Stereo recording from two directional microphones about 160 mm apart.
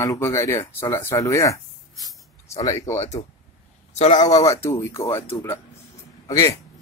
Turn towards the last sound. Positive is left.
turn(degrees=20)  # may be behind; listen again after turning